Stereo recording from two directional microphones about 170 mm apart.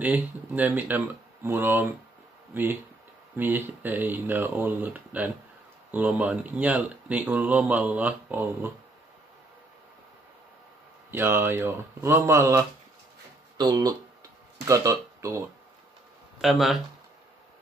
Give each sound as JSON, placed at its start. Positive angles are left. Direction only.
{"t": 0.0, "sound": "speech", "side_deg": -10}
{"t": 11.1, "sound": "speech", "side_deg": -15}
{"t": 16.3, "sound": "speech", "side_deg": 0}